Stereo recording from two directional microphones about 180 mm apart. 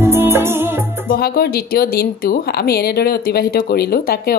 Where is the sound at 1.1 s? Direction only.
60° left (ahead or behind).